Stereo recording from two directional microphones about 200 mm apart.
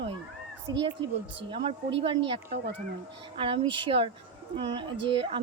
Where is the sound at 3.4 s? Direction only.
25° right (ahead or behind).